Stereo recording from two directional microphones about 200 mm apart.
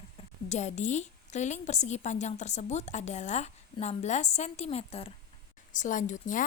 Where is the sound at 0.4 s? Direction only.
35° left (ahead or behind).